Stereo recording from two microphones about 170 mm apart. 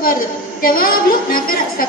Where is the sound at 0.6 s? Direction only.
55° left (ahead or behind).